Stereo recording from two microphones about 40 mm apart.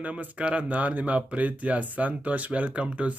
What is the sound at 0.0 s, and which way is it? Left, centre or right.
Speech, right.